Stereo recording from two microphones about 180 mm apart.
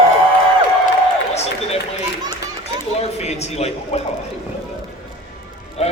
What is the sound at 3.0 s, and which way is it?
A man's voice, 35° left (ahead or behind).